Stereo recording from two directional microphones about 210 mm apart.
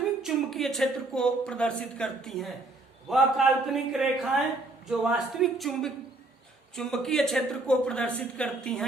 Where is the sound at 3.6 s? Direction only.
Centre (ahead or behind).